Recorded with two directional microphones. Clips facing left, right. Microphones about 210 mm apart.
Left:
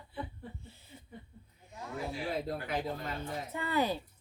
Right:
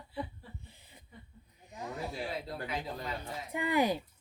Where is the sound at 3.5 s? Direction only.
15° right (ahead or behind).